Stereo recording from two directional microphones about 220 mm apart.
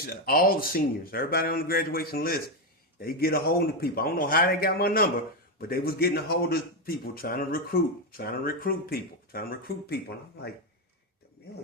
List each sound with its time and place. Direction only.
0.0 s speech: 40° left (ahead or behind)